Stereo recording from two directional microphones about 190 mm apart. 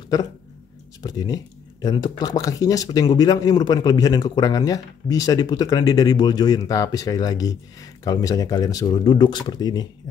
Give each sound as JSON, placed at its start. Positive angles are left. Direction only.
{"t": 1.0, "sound": "speech", "side_deg": 20}